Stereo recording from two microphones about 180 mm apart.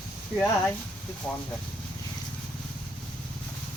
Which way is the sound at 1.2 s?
5° left (ahead or behind).